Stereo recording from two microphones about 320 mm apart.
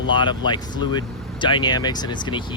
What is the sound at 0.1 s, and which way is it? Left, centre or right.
Speech, centre.